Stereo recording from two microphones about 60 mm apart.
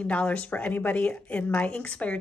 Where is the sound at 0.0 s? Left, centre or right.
Left.